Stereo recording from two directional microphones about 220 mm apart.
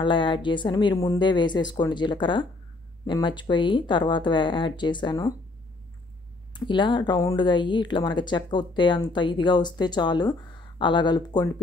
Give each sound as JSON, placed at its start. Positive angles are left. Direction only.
{"t": 0.0, "sound": "speech", "side_deg": 20}
{"t": 6.5, "sound": "speech", "side_deg": 20}